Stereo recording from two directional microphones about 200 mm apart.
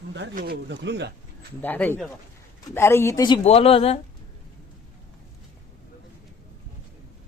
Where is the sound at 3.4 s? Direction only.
30° left (ahead or behind).